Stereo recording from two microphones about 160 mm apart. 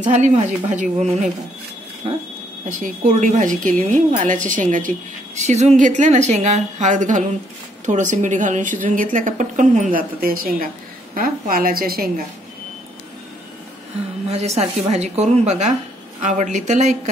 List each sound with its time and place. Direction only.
0.0 s a woman's voice: 50° right (ahead or behind)
2.8 s a woman's voice: 50° right (ahead or behind)
14.3 s a woman's voice: 40° right (ahead or behind)